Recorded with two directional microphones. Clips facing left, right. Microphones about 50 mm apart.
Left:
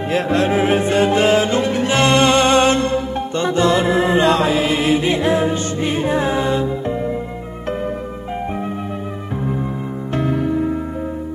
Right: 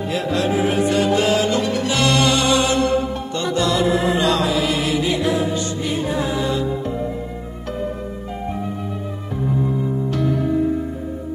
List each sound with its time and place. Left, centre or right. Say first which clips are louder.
0.0 s music: left 3 dB; left
9.3 s music: even; left